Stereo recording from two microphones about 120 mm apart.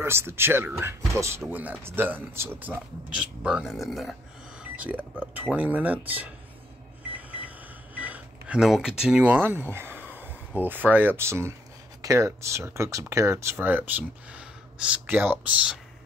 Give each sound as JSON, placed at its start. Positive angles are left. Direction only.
{"t": 0.0, "sound": "speech", "side_deg": -20}
{"t": 4.7, "sound": "speech", "side_deg": -10}
{"t": 7.1, "sound": "a sound", "side_deg": -10}
{"t": 12.0, "sound": "speech", "side_deg": -25}